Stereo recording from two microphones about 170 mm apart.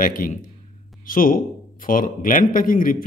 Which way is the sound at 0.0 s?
55° left (ahead or behind).